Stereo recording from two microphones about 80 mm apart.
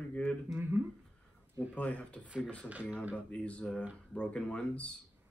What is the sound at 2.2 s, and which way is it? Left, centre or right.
Speech, centre.